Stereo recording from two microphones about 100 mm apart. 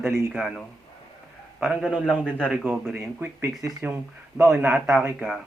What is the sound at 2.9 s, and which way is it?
Speech, 25° right (ahead or behind).